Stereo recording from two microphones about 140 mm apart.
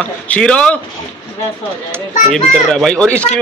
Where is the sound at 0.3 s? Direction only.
5° left (ahead or behind).